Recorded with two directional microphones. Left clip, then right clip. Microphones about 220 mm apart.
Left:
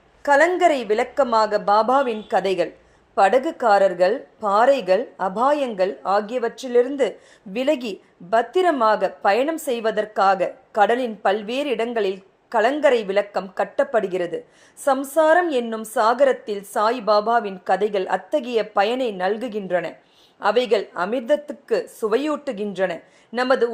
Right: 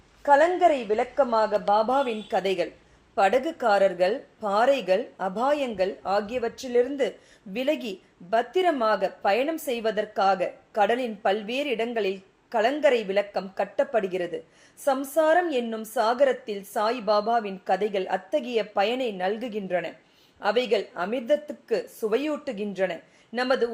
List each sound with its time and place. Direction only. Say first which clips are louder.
0.2 s speech: left 3 dB; 25° left (ahead or behind)